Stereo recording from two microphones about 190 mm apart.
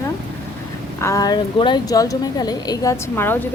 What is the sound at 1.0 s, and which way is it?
A woman's voice, 15° left (ahead or behind).